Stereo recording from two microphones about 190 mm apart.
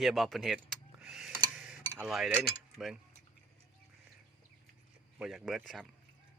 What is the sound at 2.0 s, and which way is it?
Speech, centre (ahead or behind).